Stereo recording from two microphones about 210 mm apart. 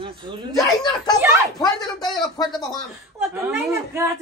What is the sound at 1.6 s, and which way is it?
Speech, 20° left (ahead or behind).